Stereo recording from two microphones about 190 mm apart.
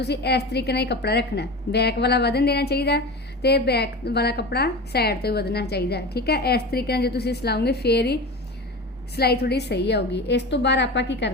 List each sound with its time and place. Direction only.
0.0 s a woman's voice: 60° left (ahead or behind)